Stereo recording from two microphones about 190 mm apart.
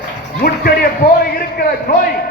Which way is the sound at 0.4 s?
50° left (ahead or behind).